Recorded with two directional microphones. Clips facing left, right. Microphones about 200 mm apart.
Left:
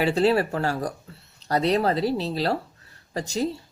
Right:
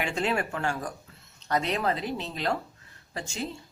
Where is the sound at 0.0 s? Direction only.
35° left (ahead or behind).